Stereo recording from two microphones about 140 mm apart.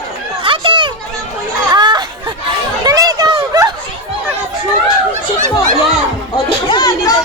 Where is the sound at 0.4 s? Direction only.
40° right (ahead or behind).